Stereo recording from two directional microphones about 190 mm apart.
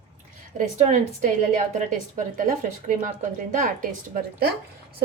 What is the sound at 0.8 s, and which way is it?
A woman's voice, 40° right (ahead or behind).